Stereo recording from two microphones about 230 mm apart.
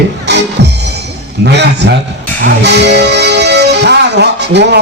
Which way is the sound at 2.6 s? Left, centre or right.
Right.